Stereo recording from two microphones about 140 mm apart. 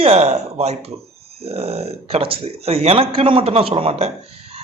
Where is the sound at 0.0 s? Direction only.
50° right (ahead or behind).